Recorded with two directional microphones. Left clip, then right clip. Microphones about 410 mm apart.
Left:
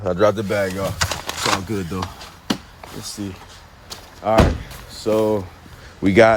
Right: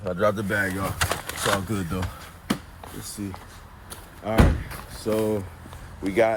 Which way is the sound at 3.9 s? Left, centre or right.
Centre.